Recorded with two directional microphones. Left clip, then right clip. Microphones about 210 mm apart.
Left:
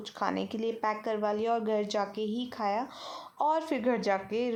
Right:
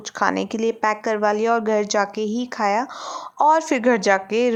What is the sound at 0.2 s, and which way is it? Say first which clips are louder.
A woman's voice: right 11 dB; 30° right (ahead or behind).